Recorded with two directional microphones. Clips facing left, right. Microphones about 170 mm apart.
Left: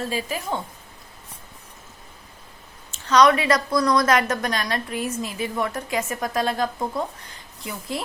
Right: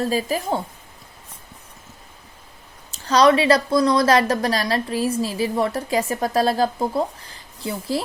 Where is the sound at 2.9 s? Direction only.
35° right (ahead or behind).